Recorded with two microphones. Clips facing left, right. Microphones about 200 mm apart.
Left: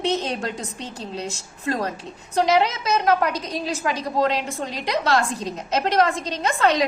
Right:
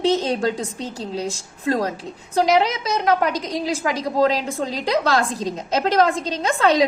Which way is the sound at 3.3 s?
90° right.